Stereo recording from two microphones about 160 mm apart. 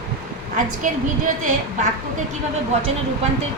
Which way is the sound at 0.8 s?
50° right (ahead or behind).